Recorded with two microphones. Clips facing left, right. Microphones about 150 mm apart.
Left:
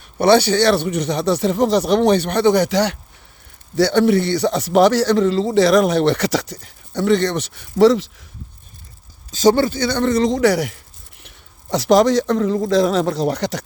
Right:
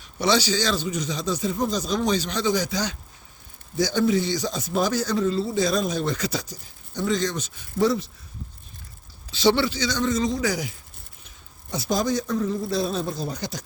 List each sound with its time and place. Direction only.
0.0 s a man's voice: 55° left (ahead or behind); by 8.1 s 90° left
9.3 s a man's voice: 45° left (ahead or behind); by 13.7 s 75° left (ahead or behind)